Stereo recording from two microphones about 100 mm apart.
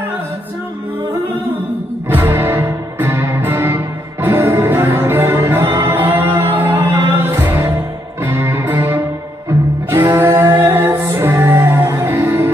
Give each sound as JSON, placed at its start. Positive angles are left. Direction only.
{"t": 2.0, "sound": "music", "side_deg": -20}
{"t": 10.1, "sound": "music", "side_deg": -25}